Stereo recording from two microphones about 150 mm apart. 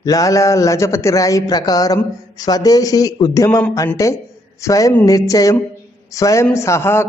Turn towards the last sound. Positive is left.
turn(degrees=15)  # may be behind; listen again after turning